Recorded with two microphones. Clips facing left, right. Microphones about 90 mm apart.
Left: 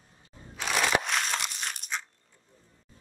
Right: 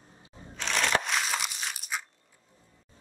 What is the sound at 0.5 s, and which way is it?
Crushing, 5° left (ahead or behind).